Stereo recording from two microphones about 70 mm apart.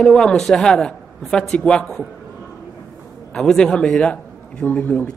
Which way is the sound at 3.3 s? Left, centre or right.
Centre.